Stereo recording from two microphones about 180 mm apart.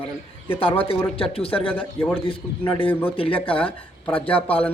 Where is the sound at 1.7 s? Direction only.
5° left (ahead or behind).